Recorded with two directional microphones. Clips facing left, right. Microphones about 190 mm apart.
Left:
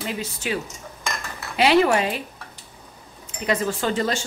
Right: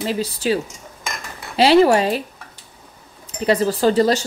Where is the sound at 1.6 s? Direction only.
35° right (ahead or behind).